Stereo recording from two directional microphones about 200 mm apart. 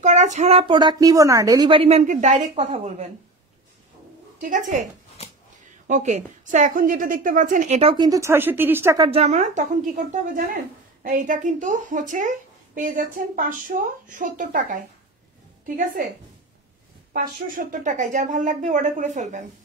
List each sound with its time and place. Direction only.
0.0 s a woman's voice: 35° right (ahead or behind)
4.4 s speech: 40° right (ahead or behind)
5.9 s speech: 35° right (ahead or behind); by 9.2 s 20° right (ahead or behind)
9.2 s speech: 40° right (ahead or behind)
17.1 s speech: 45° right (ahead or behind)